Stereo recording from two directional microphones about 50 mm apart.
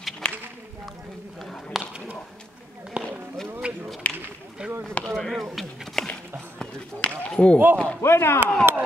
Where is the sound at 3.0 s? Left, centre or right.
Right.